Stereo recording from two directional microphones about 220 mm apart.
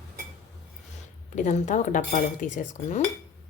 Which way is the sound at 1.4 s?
35° left (ahead or behind).